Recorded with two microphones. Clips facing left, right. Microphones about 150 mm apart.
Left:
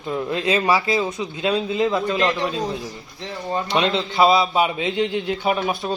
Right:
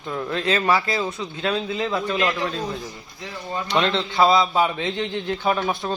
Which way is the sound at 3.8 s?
5° left (ahead or behind).